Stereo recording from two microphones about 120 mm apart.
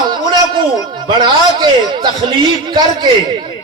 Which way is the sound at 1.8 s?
40° right (ahead or behind).